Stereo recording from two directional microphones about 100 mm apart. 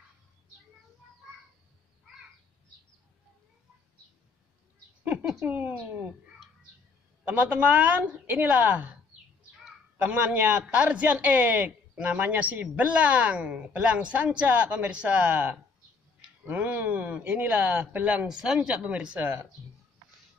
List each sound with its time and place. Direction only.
5.4 s a man's voice: 20° right (ahead or behind)
7.2 s a man's voice: 15° right (ahead or behind)
9.9 s a man's voice: 10° right (ahead or behind)